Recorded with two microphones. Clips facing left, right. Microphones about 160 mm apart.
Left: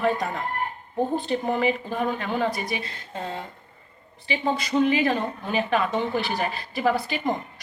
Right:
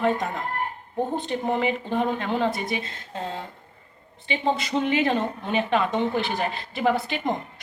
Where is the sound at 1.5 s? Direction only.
20° right (ahead or behind).